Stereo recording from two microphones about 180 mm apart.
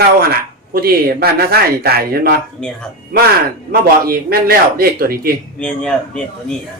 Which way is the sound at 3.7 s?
55° right (ahead or behind).